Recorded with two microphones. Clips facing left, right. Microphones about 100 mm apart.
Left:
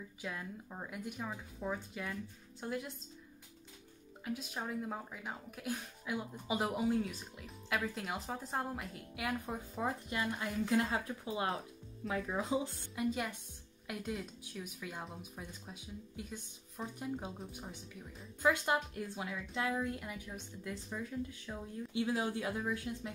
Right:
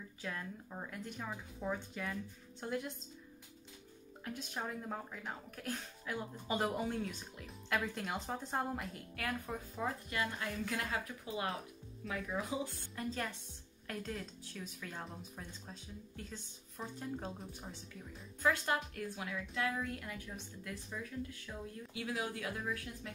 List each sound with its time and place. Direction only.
0.2 s speech: 10° left (ahead or behind)
4.2 s speech: 5° left (ahead or behind)
9.1 s a woman's voice: 20° left (ahead or behind)
12.9 s a woman's voice: 10° left (ahead or behind)